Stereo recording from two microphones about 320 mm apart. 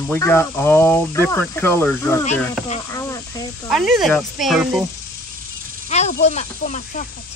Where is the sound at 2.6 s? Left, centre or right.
Centre.